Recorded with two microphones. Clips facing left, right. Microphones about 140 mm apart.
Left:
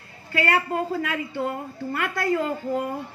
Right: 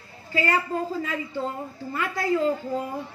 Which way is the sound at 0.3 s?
60° left (ahead or behind).